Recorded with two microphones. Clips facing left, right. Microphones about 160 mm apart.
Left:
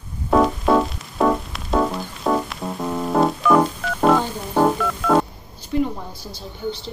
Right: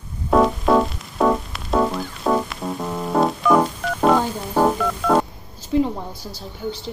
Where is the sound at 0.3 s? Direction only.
Centre (ahead or behind).